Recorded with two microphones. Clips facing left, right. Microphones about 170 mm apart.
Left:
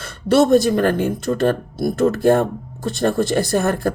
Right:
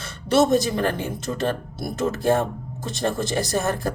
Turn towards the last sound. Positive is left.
turn(degrees=55)  # may be behind; listen again after turning